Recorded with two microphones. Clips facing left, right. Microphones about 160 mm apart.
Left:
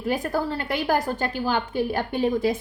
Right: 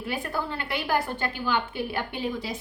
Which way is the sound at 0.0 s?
40° left (ahead or behind).